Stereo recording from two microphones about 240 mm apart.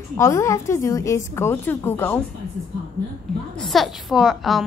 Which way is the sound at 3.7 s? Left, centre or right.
Centre.